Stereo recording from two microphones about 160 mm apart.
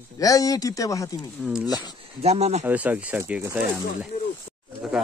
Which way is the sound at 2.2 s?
40° right (ahead or behind).